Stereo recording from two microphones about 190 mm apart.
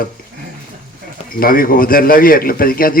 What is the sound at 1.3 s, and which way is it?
A man's voice, 50° left (ahead or behind).